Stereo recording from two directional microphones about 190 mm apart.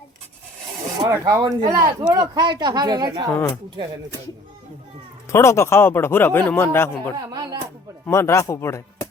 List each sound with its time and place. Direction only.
1.0 s speech: 15° right (ahead or behind)
3.3 s speech: 15° left (ahead or behind)
5.3 s speech: 15° left (ahead or behind)
7.2 s a sound: 20° right (ahead or behind)
8.0 s speech: 15° left (ahead or behind)